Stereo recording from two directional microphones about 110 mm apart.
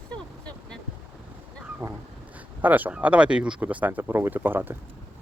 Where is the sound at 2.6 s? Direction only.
15° right (ahead or behind).